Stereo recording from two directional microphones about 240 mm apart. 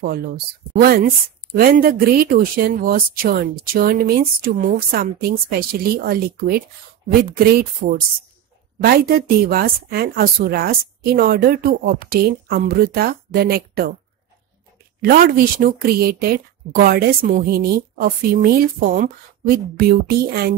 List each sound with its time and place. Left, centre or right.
0.0 s speech: right
15.0 s speech: right